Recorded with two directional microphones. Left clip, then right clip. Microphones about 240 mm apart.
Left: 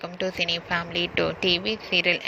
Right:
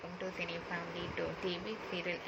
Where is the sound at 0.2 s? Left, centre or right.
Left.